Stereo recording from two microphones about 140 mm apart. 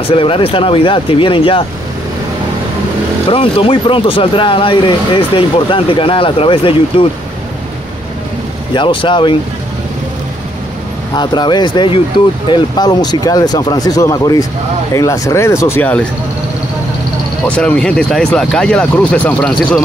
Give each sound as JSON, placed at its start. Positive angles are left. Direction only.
{"t": 0.1, "sound": "speech", "side_deg": 40}
{"t": 3.3, "sound": "speech", "side_deg": 40}
{"t": 8.7, "sound": "speech", "side_deg": 35}
{"t": 11.1, "sound": "speech", "side_deg": 30}
{"t": 17.6, "sound": "speech", "side_deg": 5}